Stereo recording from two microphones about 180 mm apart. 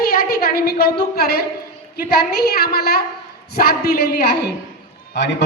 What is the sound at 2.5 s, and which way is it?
A woman's voice, 60° left (ahead or behind).